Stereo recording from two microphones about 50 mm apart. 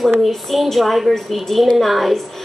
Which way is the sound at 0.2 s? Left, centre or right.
Centre.